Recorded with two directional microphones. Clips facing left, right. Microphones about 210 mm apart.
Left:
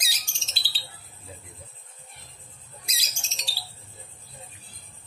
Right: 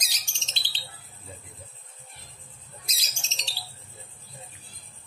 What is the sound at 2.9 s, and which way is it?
Bird, 10° left (ahead or behind).